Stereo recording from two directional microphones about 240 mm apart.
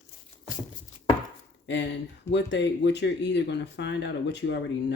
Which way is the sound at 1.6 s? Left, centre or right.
Left.